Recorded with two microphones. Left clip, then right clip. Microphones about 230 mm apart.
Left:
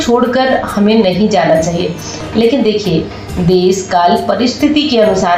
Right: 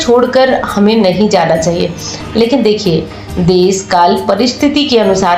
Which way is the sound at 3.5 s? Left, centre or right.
Right.